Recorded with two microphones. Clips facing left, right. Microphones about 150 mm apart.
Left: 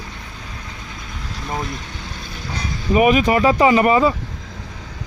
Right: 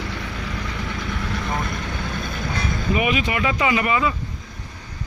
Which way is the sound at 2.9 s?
40° left (ahead or behind).